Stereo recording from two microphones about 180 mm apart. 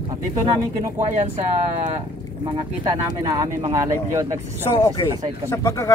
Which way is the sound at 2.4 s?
25° right (ahead or behind).